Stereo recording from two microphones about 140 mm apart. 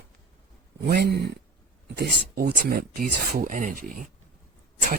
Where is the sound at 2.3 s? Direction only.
90° right; by 3.8 s 70° right (ahead or behind).